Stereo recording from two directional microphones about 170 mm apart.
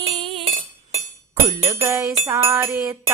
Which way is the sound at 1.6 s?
15° right (ahead or behind).